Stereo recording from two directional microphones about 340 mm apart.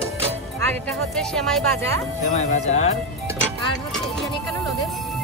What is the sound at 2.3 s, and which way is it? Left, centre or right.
Speech, centre.